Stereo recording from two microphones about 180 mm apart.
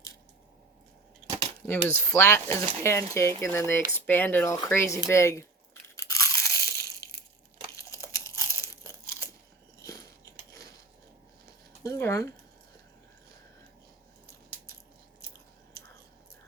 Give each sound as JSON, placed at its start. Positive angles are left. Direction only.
{"t": 1.6, "sound": "speech", "side_deg": 10}
{"t": 6.0, "sound": "crunch", "side_deg": 15}
{"t": 7.7, "sound": "tearing", "side_deg": 15}
{"t": 11.8, "sound": "a sound", "side_deg": 15}